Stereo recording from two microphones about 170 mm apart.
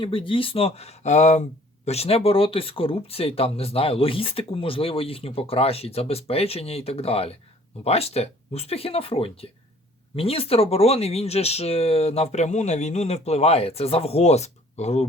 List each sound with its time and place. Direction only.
0.0 s speech: 30° left (ahead or behind)